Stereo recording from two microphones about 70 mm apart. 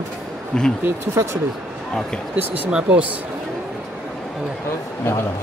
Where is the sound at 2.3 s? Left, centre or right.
Right.